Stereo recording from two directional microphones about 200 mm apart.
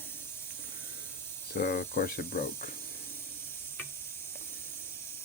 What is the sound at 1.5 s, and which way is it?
Speech, 50° left (ahead or behind).